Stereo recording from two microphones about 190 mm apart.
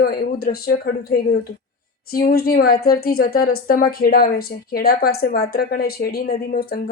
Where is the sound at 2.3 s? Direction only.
50° left (ahead or behind).